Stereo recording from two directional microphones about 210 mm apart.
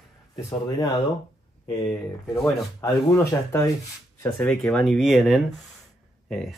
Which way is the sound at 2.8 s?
15° left (ahead or behind).